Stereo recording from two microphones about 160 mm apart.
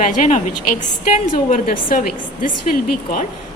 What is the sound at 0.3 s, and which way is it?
A woman's voice, 50° left (ahead or behind).